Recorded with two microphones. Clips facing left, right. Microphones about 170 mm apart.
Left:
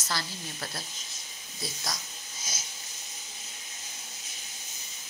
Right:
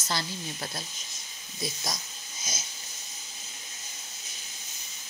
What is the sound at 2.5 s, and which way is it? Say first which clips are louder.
Wheeze: right 3 dB; 20° right (ahead or behind).